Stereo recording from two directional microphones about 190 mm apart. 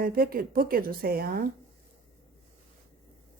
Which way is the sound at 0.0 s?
50° right (ahead or behind).